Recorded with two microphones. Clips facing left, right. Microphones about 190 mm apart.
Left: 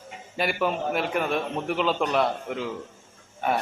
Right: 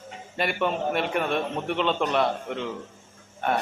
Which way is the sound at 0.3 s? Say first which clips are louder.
Even; centre (ahead or behind).